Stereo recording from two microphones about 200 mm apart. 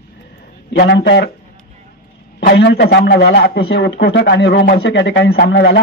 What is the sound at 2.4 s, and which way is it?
A man's voice, 55° left (ahead or behind).